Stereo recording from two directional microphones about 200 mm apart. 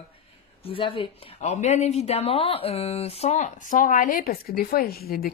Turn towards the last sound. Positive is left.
turn(degrees=50)  # may be behind; listen again after turning